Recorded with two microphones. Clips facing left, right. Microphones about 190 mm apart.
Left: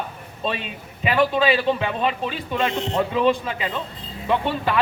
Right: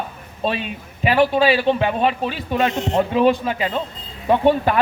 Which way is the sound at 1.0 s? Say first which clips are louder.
Right 3 dB; 35° right (ahead or behind).